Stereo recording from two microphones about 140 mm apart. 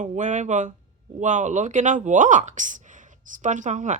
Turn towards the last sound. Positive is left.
turn(degrees=-60)  # may be behind; listen again after turning